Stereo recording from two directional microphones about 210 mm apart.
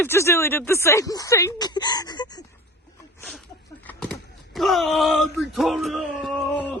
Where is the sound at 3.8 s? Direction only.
5° left (ahead or behind).